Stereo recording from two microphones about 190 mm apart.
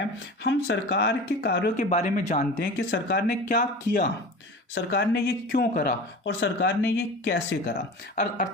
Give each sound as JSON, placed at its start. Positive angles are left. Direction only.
{"t": 0.4, "sound": "speech", "side_deg": 65}
{"t": 1.7, "sound": "speech", "side_deg": 40}
{"t": 2.6, "sound": "speech", "side_deg": 60}
{"t": 6.2, "sound": "speech", "side_deg": 65}